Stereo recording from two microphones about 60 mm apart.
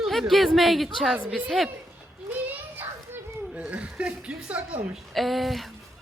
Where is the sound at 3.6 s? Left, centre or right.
Right.